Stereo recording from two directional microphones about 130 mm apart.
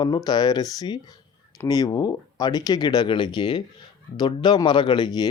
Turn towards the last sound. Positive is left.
turn(degrees=35)  # may be behind; listen again after turning